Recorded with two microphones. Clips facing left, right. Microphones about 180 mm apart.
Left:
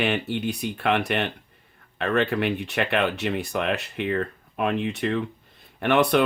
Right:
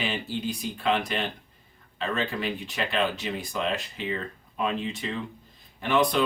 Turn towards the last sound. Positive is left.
turn(degrees=65)  # may be behind; listen again after turning